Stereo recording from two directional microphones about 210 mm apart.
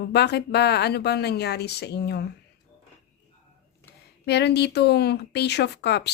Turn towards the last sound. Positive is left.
turn(degrees=55)  # may be behind; listen again after turning